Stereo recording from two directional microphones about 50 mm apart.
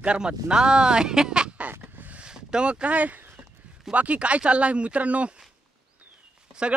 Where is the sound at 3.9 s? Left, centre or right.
Right.